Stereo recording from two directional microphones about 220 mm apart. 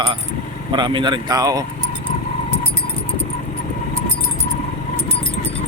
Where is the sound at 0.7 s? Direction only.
20° right (ahead or behind).